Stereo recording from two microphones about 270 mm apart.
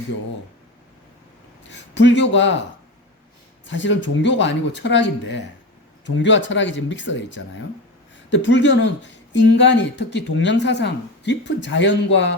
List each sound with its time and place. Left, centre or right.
1.7 s speech: left
3.7 s speech: left